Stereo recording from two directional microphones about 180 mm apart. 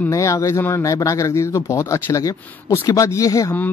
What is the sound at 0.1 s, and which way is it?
Speech, 20° left (ahead or behind).